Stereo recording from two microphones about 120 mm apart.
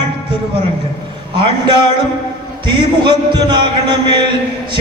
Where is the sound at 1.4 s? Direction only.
40° right (ahead or behind).